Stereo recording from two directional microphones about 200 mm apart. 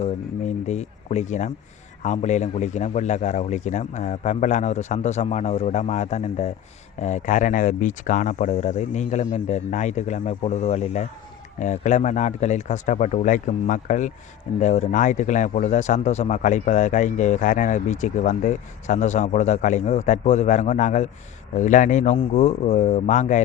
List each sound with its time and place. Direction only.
0.0 s a man's voice: 35° left (ahead or behind)